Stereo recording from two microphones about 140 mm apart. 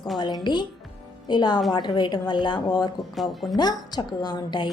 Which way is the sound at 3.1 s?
Centre (ahead or behind).